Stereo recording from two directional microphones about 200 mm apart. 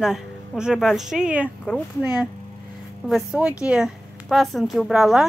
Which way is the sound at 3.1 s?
5° right (ahead or behind).